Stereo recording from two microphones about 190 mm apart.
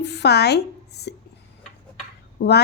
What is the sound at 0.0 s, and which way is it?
A woman's voice, 60° left (ahead or behind).